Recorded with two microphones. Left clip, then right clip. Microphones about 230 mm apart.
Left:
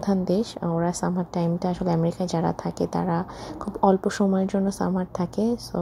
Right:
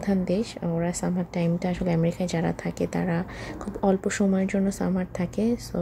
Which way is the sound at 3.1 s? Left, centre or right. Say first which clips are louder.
Left 3 dB; centre.